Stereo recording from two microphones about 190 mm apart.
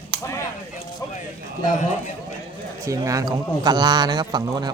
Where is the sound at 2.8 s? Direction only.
15° right (ahead or behind).